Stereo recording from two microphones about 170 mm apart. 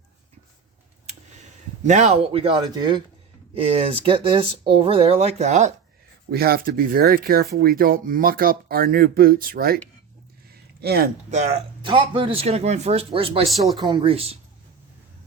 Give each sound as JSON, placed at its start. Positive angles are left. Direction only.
{"t": 1.8, "sound": "speech", "side_deg": -45}
{"t": 6.3, "sound": "speech", "side_deg": -65}
{"t": 11.3, "sound": "speech", "side_deg": -40}